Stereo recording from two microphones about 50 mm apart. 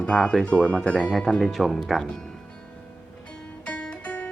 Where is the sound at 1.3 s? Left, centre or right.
Centre.